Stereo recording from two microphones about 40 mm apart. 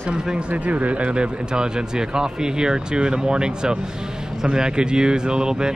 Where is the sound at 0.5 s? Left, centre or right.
Right.